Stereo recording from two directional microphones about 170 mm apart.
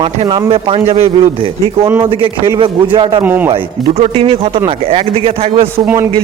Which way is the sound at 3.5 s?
35° right (ahead or behind).